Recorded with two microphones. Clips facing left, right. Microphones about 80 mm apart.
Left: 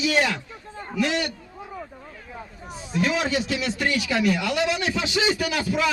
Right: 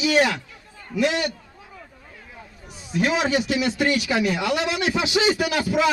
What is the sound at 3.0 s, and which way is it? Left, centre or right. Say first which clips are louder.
A man's voice: right 3 dB; centre.